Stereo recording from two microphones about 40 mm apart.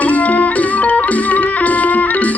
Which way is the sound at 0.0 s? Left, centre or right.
Left.